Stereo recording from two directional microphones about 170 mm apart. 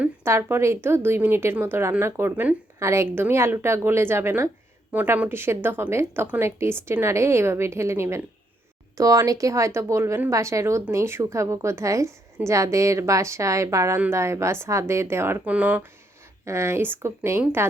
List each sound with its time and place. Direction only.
0.0 s a woman's voice: 15° right (ahead or behind)